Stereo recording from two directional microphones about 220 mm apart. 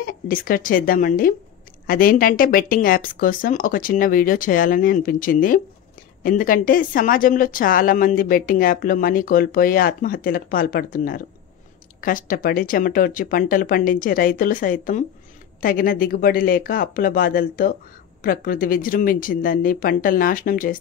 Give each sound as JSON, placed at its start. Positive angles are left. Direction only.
{"t": 0.0, "sound": "a woman's voice", "side_deg": 40}